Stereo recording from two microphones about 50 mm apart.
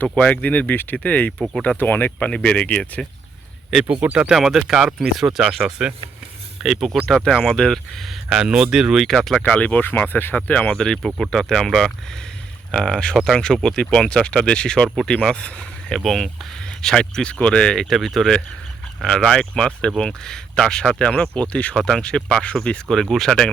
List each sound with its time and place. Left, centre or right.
0.2 s speech: left
2.2 s speech: left
3.8 s speech: right
4.3 s speech: centre
8.4 s speech: centre
9.0 s speech: centre
9.6 s speech: left
10.3 s speech: left
10.7 s speech: centre
16.0 s speech: centre
17.8 s speech: centre
19.0 s speech: centre
21.8 s speech: centre
22.9 s speech: centre